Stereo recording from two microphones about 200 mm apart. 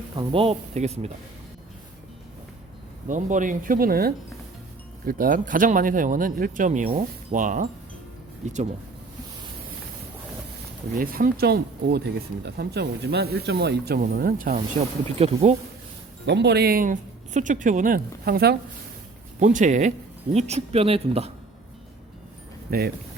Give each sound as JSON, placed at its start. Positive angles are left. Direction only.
{"t": 0.2, "sound": "speech", "side_deg": -25}
{"t": 3.1, "sound": "speech", "side_deg": -40}
{"t": 10.9, "sound": "speech", "side_deg": -45}
{"t": 15.2, "sound": "speech", "side_deg": -30}
{"t": 16.2, "sound": "speech", "side_deg": -60}
{"t": 19.4, "sound": "speech", "side_deg": -40}
{"t": 22.7, "sound": "speech", "side_deg": -50}